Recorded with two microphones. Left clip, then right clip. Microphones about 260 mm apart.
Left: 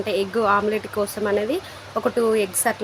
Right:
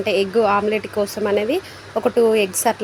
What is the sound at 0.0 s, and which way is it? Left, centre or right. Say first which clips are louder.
Speech: right 4 dB; left.